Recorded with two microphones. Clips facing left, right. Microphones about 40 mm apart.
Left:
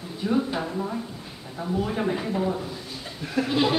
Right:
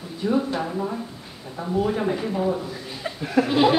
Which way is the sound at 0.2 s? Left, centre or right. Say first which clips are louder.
Right 2 dB; centre.